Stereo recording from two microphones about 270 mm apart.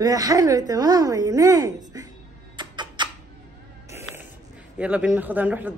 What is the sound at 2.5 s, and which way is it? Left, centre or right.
Tick-tock, centre.